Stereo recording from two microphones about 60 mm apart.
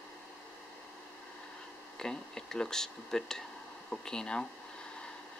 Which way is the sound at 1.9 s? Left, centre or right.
Centre.